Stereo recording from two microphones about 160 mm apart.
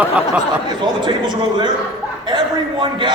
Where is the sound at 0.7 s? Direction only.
30° right (ahead or behind).